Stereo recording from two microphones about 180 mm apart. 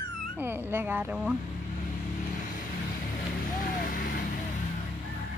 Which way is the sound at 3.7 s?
50° left (ahead or behind).